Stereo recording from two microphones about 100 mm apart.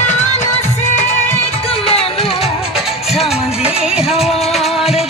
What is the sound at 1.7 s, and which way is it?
Music, 75° left (ahead or behind).